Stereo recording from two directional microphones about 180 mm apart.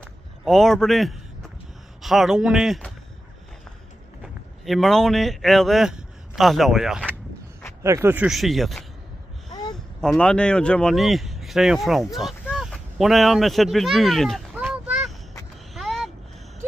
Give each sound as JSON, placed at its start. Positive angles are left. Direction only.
{"t": 0.0, "sound": "a sound", "side_deg": 0}
{"t": 2.0, "sound": "speech", "side_deg": 0}
{"t": 4.2, "sound": "speech", "side_deg": 0}
{"t": 7.8, "sound": "speech", "side_deg": -15}
{"t": 9.5, "sound": "gasp", "side_deg": 20}
{"t": 9.9, "sound": "speech", "side_deg": 5}
{"t": 15.7, "sound": "a sound", "side_deg": 0}